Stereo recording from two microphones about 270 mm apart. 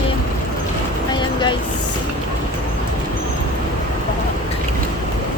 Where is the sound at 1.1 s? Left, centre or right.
Centre.